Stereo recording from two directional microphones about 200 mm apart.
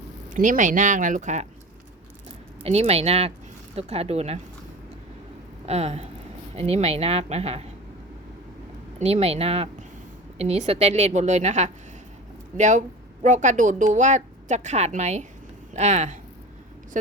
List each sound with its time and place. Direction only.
0.3 s a woman's voice: 40° right (ahead or behind)
2.6 s a woman's voice: 30° right (ahead or behind)
5.6 s a woman's voice: 30° right (ahead or behind)
9.0 s a woman's voice: 35° right (ahead or behind)